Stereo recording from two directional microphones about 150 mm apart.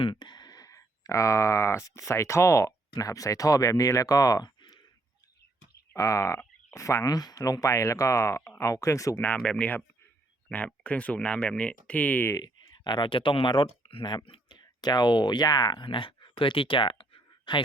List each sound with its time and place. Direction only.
0.0 s speech: 30° left (ahead or behind)
5.9 s speech: 20° left (ahead or behind)
9.2 s speech: 5° left (ahead or behind)
12.4 s speech: 30° left (ahead or behind)